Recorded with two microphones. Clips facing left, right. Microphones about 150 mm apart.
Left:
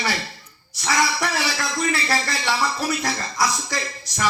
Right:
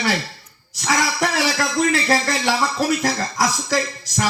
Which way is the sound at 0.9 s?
45° right (ahead or behind).